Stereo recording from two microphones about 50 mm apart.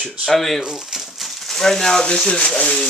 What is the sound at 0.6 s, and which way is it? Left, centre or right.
Speech, centre.